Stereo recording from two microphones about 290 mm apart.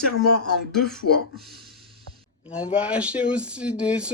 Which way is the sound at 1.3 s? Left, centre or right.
Centre.